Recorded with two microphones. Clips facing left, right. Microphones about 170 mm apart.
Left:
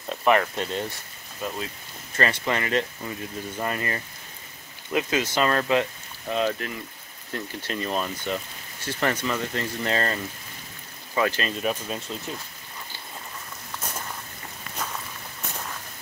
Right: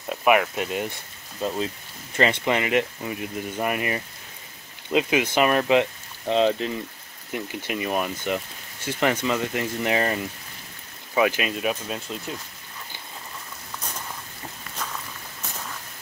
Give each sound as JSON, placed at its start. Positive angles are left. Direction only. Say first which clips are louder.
{"t": 0.1, "sound": "speech", "louder": "right 1 dB", "side_deg": -10}
{"t": 1.4, "sound": "speech", "louder": "right 5 dB", "side_deg": -30}
{"t": 2.1, "sound": "speech", "louder": "right 3 dB", "side_deg": -15}
{"t": 7.3, "sound": "speech", "louder": "right 2 dB", "side_deg": -15}